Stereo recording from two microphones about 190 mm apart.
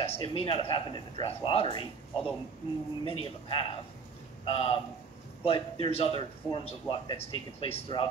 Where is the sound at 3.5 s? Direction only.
25° left (ahead or behind).